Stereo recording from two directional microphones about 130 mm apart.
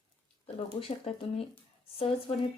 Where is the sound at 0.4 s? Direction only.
50° left (ahead or behind).